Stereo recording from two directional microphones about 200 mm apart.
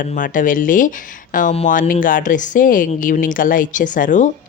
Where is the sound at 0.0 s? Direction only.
40° left (ahead or behind).